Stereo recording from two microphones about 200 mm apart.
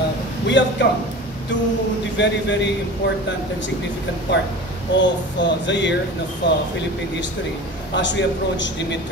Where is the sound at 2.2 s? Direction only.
60° left (ahead or behind).